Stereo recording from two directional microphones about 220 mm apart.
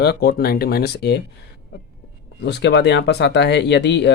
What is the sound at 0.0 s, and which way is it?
Speech, 45° left (ahead or behind).